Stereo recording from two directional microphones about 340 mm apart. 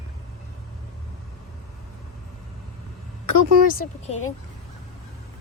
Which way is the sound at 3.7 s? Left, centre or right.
Left.